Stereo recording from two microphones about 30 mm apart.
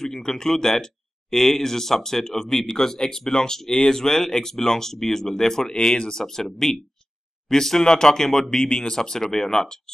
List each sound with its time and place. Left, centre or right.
0.0 s speech: centre
8.7 s speech: left